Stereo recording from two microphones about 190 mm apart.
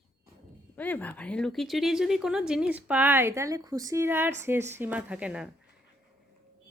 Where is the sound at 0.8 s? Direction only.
10° left (ahead or behind).